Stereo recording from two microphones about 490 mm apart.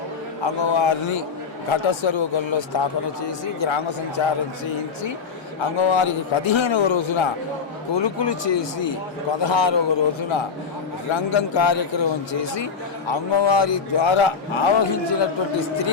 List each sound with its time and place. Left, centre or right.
0.4 s a man's voice: left
5.7 s a man's voice: left
7.9 s a man's voice: left